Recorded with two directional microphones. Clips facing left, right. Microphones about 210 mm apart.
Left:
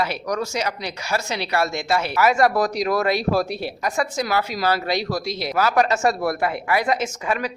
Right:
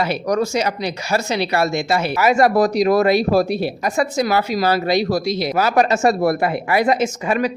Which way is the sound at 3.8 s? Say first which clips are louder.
Right 2 dB; 25° right (ahead or behind).